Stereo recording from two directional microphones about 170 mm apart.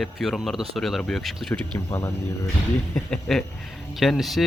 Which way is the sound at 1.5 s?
15° left (ahead or behind).